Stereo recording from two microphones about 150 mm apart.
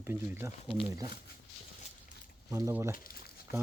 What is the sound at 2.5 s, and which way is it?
Speech, 20° right (ahead or behind).